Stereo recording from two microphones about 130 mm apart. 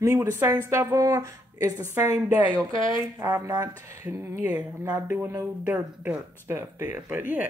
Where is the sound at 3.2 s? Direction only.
20° right (ahead or behind).